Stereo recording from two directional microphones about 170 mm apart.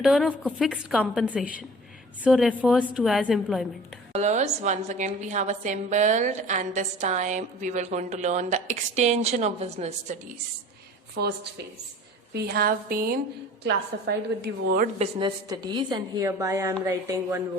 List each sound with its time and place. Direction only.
0.0 s a woman's voice: centre (ahead or behind)
4.1 s a woman's voice: 40° right (ahead or behind)
11.1 s a woman's voice: 70° right (ahead or behind)
13.7 s a woman's voice: 80° right
14.9 s speech: 40° right (ahead or behind)
15.4 s a woman's voice: 25° right (ahead or behind)